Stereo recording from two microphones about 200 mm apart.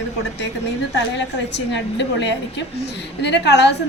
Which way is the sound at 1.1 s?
60° left (ahead or behind).